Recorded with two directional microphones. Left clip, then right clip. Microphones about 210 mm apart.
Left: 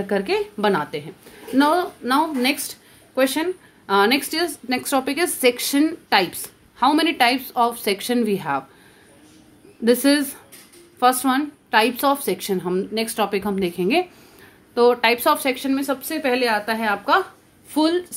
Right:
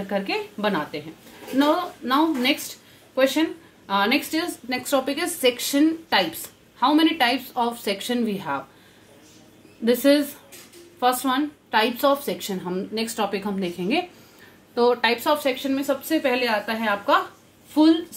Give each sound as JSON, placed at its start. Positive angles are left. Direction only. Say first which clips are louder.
{"t": 0.1, "sound": "a woman's voice", "louder": "left 4 dB", "side_deg": 50}
{"t": 9.8, "sound": "a woman's voice", "louder": "left 1 dB", "side_deg": 45}